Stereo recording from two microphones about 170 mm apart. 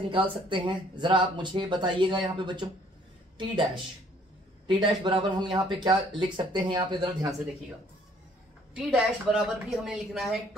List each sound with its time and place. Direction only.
0.1 s speech: 30° right (ahead or behind)
8.7 s a woman's voice: 5° right (ahead or behind)